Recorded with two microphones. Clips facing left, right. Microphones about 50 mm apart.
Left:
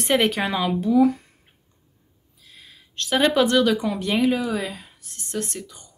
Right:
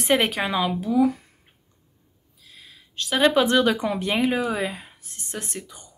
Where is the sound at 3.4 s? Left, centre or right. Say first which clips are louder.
Left 1 dB; right.